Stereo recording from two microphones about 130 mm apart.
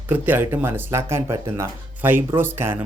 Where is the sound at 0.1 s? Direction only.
15° right (ahead or behind).